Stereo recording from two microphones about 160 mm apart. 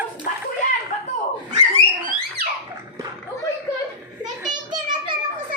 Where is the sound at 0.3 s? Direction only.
55° left (ahead or behind).